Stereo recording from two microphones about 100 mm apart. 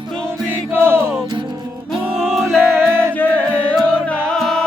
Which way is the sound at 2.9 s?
25° right (ahead or behind).